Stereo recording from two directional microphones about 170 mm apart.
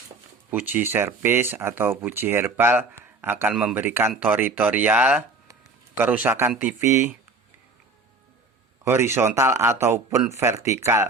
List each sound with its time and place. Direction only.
0.5 s a man's voice: 10° right (ahead or behind)
8.8 s speech: 15° right (ahead or behind)